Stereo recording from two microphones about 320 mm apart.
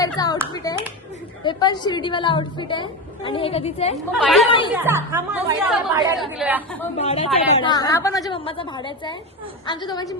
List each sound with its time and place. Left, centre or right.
0.0 s a woman's voice: centre
3.9 s speech: centre
7.0 s a woman's voice: centre